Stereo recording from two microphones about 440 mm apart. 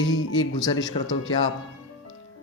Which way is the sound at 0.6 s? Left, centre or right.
Centre.